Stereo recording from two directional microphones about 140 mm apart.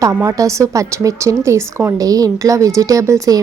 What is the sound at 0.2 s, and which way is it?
Speech, 25° right (ahead or behind).